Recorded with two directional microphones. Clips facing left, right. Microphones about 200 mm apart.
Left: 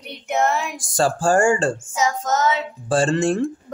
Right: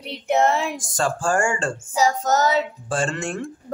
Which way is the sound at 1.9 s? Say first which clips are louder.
Right 2 dB; 35° right (ahead or behind).